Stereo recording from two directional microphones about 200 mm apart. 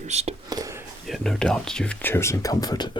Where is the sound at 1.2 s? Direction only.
Centre (ahead or behind); by 2.9 s 20° left (ahead or behind).